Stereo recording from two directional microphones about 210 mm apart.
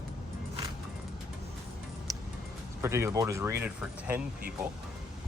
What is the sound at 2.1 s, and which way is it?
Music, 15° right (ahead or behind).